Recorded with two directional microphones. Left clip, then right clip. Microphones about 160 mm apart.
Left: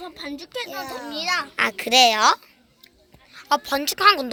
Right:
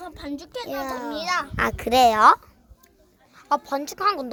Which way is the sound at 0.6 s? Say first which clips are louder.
Right 2 dB; 80° right.